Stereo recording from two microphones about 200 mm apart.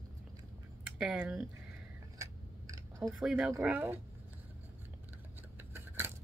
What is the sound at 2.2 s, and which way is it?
Scissors, 15° right (ahead or behind).